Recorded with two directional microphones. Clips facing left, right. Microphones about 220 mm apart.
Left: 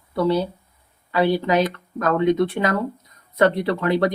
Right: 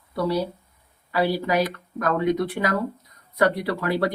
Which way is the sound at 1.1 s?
20° left (ahead or behind).